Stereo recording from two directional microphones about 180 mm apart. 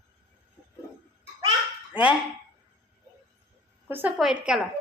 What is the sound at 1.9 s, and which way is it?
Fowl, 5° right (ahead or behind).